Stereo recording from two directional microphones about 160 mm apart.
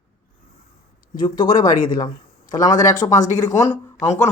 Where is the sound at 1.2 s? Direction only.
25° left (ahead or behind).